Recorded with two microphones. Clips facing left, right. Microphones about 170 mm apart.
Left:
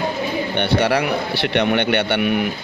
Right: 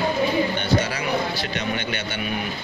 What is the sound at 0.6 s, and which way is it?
Speech, 65° left (ahead or behind).